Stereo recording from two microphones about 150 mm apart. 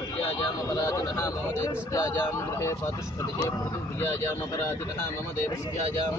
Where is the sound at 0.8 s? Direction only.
20° left (ahead or behind).